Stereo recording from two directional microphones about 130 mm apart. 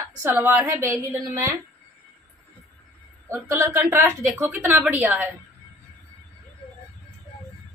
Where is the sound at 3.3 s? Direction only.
15° right (ahead or behind).